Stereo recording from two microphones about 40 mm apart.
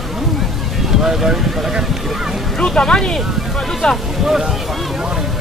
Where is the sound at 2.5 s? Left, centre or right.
Centre.